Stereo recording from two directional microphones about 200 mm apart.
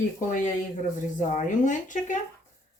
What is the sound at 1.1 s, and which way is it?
Speech, 40° left (ahead or behind).